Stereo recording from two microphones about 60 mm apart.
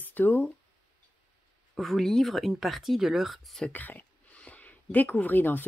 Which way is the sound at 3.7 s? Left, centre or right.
Left.